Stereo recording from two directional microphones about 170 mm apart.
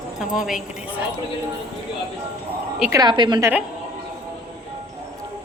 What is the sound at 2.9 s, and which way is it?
Speech, 25° right (ahead or behind).